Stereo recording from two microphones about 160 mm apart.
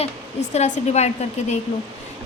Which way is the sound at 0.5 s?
45° left (ahead or behind).